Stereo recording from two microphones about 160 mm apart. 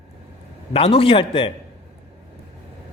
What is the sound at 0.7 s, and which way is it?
Speech, 35° left (ahead or behind).